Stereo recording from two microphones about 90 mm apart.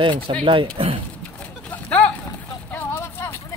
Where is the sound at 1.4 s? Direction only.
15° left (ahead or behind).